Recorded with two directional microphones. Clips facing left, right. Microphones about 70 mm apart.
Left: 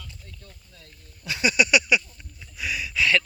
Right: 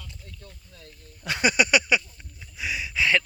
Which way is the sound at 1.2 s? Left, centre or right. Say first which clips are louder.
Even; right.